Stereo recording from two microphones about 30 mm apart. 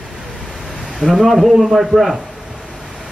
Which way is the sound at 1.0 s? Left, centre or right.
Centre.